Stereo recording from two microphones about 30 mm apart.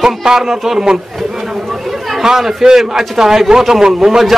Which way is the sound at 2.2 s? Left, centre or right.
Centre.